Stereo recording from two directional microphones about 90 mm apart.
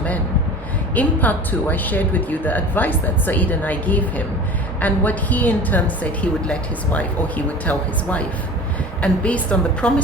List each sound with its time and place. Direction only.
0.9 s a woman's voice: 20° left (ahead or behind)